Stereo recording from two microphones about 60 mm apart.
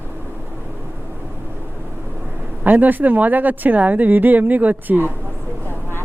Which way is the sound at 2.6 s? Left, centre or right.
Right.